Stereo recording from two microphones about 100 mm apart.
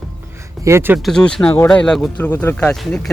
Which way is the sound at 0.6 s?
25° right (ahead or behind).